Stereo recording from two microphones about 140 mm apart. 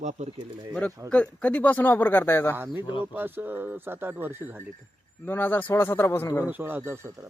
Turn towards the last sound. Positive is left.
turn(degrees=-15)  # may be behind; listen again after turning